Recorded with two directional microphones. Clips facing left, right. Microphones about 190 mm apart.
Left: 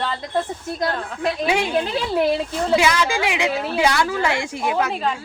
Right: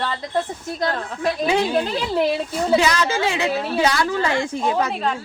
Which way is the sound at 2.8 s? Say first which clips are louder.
Even; 10° left (ahead or behind).